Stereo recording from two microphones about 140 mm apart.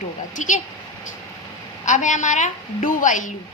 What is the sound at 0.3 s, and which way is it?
Speech, 65° left (ahead or behind).